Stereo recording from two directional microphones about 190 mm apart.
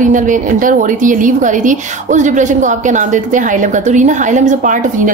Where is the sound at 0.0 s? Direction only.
40° right (ahead or behind).